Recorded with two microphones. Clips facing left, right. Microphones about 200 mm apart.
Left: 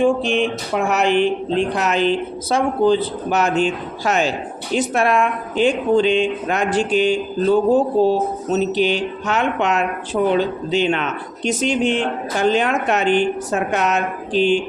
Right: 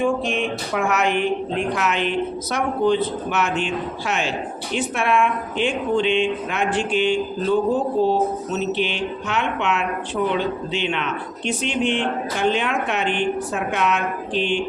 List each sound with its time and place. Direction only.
0.0 s a woman's voice: 30° left (ahead or behind)